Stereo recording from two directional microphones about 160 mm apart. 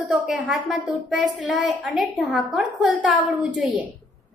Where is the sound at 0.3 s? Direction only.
Centre (ahead or behind).